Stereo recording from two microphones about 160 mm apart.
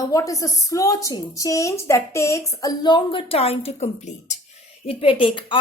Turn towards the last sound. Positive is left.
turn(degrees=30)  # may be behind; listen again after turning